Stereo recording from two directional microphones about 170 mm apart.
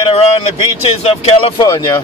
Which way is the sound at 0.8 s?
35° left (ahead or behind).